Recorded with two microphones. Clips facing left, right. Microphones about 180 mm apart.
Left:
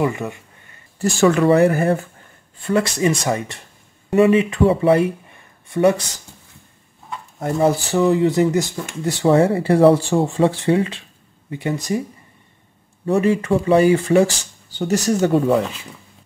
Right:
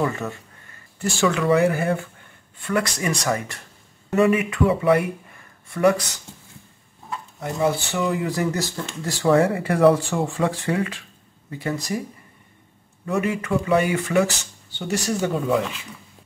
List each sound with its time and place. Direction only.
0.0 s speech: 15° left (ahead or behind)
0.9 s speech: 45° left (ahead or behind)
2.6 s speech: 25° left (ahead or behind)
7.3 s speech: 40° left (ahead or behind); by 9.1 s 15° left (ahead or behind)
9.2 s speech: 30° left (ahead or behind)
13.0 s speech: 30° left (ahead or behind)